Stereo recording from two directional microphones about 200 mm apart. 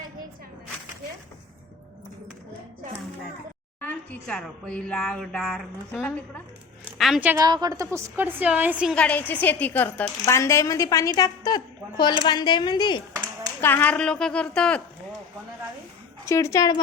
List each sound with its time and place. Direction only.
3.8 s speech: 10° left (ahead or behind)
7.3 s a woman's voice: 20° right (ahead or behind)
9.0 s speech: 10° left (ahead or behind)
13.6 s speech: 10° left (ahead or behind)
16.2 s speech: 15° left (ahead or behind)